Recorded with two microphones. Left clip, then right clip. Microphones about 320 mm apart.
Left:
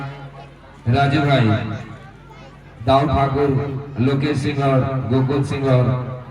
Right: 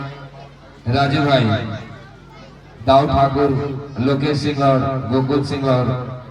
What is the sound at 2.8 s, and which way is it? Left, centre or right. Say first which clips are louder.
A man's voice: right 3 dB; right.